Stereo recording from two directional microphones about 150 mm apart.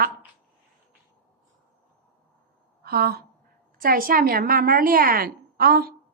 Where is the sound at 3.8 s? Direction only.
70° right (ahead or behind); by 6.0 s 90° right.